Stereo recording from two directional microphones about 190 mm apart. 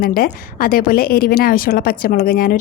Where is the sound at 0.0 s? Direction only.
50° left (ahead or behind).